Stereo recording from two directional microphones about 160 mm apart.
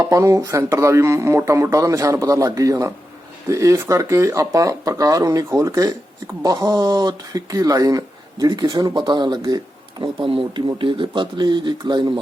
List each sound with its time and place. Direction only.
0.0 s speech: 20° right (ahead or behind)